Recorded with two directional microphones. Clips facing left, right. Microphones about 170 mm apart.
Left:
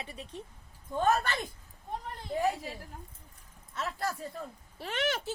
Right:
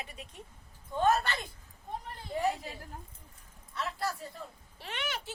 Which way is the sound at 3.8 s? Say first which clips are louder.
Left 1 dB; 45° left (ahead or behind).